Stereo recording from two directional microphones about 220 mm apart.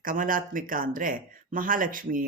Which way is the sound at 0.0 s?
40° right (ahead or behind).